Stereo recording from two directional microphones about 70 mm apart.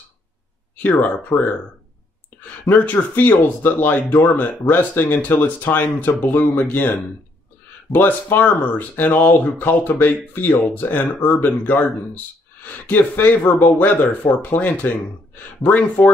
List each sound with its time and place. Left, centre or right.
0.8 s speech: left
2.7 s speech: left